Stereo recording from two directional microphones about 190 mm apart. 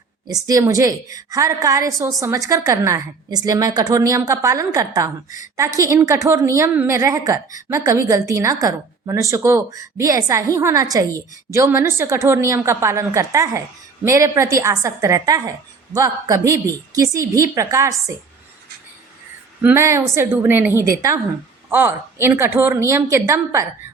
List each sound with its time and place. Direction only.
0.3 s a woman's voice: 20° right (ahead or behind)
19.6 s a woman's voice: 15° right (ahead or behind)